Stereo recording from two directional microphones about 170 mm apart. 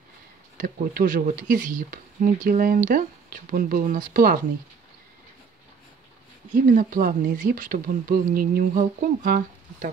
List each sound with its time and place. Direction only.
0.9 s speech: 50° right (ahead or behind)
6.5 s speech: 50° right (ahead or behind)